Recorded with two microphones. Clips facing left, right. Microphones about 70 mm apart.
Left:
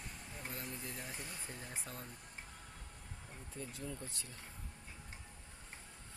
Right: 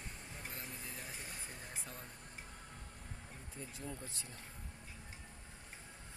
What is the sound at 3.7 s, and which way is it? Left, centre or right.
Speech, right.